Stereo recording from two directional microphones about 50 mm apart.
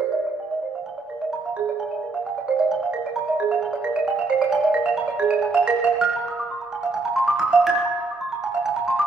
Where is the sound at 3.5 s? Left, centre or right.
Centre.